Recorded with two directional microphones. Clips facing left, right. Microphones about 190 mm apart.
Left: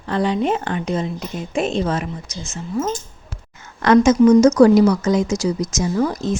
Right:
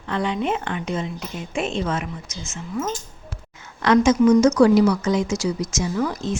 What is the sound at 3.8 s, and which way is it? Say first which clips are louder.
A woman's voice: left 4 dB; 45° left (ahead or behind).